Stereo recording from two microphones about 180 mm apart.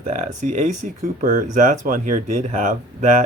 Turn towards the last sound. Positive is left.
turn(degrees=-45)  # may be behind; listen again after turning